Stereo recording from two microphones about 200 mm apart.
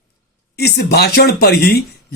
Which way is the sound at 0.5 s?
55° left (ahead or behind).